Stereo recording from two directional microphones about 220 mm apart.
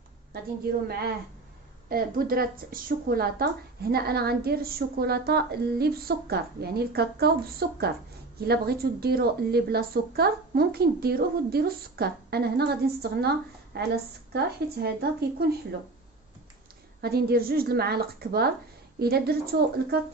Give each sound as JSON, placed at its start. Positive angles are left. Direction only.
{"t": 0.8, "sound": "a woman's voice", "side_deg": -45}
{"t": 17.0, "sound": "a woman's voice", "side_deg": -45}